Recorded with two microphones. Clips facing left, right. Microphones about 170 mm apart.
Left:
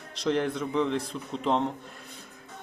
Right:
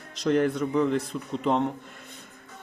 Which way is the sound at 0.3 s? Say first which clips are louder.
Right 4 dB; 5° right (ahead or behind).